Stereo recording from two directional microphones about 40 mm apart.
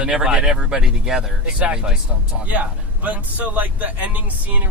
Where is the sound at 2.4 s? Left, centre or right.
Right.